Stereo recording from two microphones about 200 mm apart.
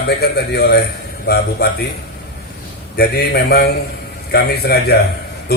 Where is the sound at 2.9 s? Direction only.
55° left (ahead or behind).